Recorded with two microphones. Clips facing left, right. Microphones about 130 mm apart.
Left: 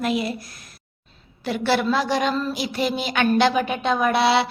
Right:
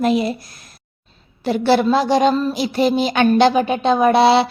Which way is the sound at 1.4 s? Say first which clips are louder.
Right 6 dB; 30° right (ahead or behind).